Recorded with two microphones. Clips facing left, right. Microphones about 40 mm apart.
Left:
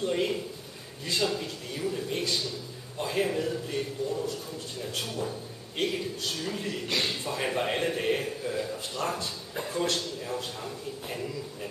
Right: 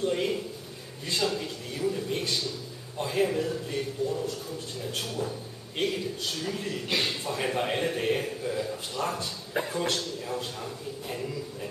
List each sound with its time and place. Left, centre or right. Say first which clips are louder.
0.0 s a man's voice: right 1 dB; centre
9.0 s speech: right 1 dB; right
9.5 s a sound: right 8 dB; right
9.9 s a man's voice: even; centre